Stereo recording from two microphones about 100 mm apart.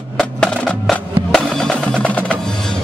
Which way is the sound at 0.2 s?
5° left (ahead or behind).